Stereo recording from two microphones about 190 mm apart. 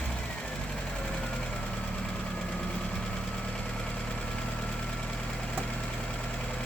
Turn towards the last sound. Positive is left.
turn(degrees=5)  # may be behind; listen again after turning